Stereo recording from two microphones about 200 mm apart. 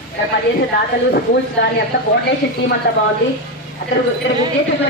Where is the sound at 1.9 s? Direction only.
60° left (ahead or behind).